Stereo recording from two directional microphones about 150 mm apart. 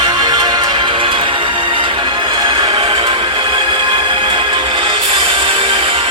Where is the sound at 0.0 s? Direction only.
30° right (ahead or behind).